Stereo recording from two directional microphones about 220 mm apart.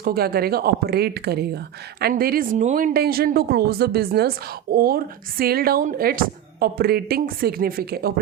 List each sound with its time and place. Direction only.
0.0 s speech: 45° right (ahead or behind)